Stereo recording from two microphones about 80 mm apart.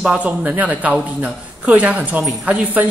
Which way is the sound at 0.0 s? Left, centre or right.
Centre.